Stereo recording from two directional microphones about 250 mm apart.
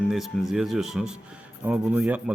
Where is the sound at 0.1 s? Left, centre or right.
Centre.